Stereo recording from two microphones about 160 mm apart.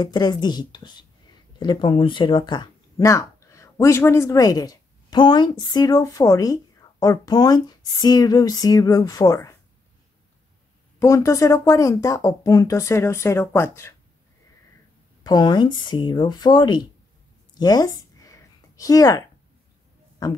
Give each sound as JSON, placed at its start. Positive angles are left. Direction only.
{"t": 0.0, "sound": "a woman's voice", "side_deg": 25}
{"t": 11.0, "sound": "a woman's voice", "side_deg": 20}
{"t": 15.2, "sound": "a woman's voice", "side_deg": 25}
{"t": 17.6, "sound": "a sound", "side_deg": 25}
{"t": 20.2, "sound": "a man's voice", "side_deg": 25}